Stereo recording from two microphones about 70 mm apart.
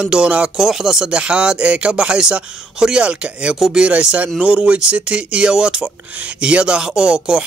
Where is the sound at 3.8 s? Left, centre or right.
Centre.